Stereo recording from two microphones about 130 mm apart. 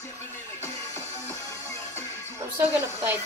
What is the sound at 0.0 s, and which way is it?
Music, 20° left (ahead or behind).